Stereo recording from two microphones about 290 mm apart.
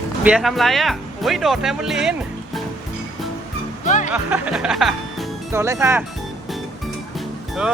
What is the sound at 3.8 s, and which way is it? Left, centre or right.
Music, left.